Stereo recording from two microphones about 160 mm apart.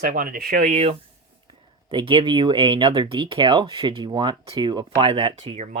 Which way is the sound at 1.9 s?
35° right (ahead or behind).